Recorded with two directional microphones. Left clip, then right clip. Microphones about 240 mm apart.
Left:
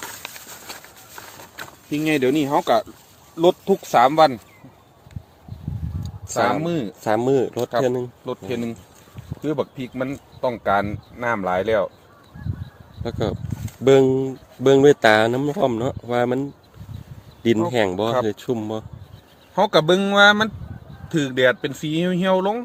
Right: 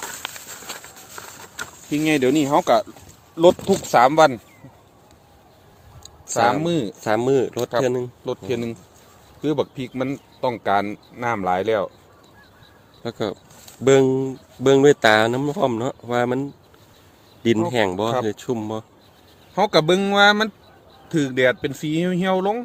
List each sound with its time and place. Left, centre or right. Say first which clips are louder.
0.0 s a sound: right 2 dB; right
1.9 s speech: right 1 dB; centre
3.9 s speech: right 1 dB; right
6.2 s a sound: right 2 dB; centre
6.6 s speech: right 2 dB; right
7.0 s speech: left 1 dB; centre
8.2 s speech: right 2 dB; right
13.0 s speech: left 1 dB; centre
19.5 s speech: left 1 dB; right